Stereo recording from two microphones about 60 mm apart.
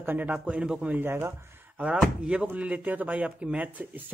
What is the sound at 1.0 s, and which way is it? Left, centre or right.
Speech, right.